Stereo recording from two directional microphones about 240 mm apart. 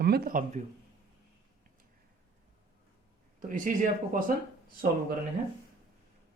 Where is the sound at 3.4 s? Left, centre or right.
Right.